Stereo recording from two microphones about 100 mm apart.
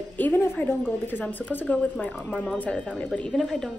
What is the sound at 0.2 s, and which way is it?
A woman's voice, 20° left (ahead or behind).